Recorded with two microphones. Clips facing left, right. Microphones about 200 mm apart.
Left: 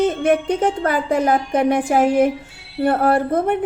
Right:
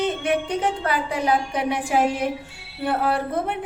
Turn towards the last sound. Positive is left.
turn(degrees=50)  # may be behind; listen again after turning